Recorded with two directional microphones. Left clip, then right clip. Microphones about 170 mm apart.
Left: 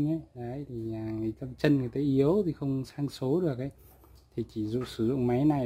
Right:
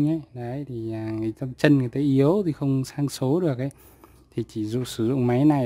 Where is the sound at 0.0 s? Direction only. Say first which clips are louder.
Right 6 dB; 40° right (ahead or behind).